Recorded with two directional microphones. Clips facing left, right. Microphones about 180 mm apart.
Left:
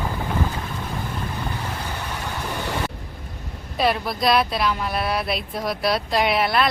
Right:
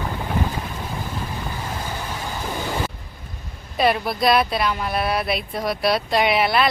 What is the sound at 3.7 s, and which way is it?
Speech, centre (ahead or behind).